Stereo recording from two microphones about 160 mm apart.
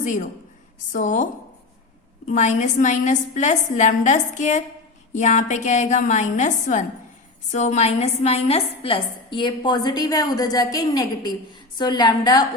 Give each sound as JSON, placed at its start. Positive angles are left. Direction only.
{"t": 0.0, "sound": "a woman's voice", "side_deg": 55}